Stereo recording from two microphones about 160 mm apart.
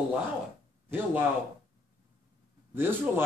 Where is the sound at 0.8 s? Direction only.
10° right (ahead or behind).